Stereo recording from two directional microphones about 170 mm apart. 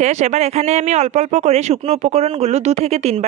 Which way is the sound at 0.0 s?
45° right (ahead or behind).